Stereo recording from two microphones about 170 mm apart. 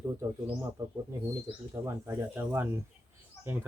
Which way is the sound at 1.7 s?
20° right (ahead or behind).